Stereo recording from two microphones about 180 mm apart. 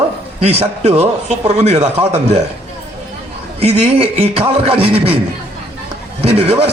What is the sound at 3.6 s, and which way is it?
A man's voice, 35° right (ahead or behind).